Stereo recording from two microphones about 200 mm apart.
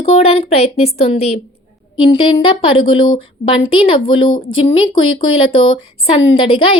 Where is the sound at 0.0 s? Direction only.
30° left (ahead or behind).